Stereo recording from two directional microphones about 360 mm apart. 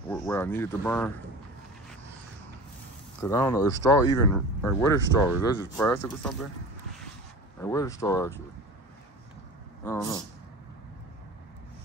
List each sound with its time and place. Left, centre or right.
0.1 s speech: centre
3.2 s speech: centre
7.6 s speech: centre
9.8 s speech: centre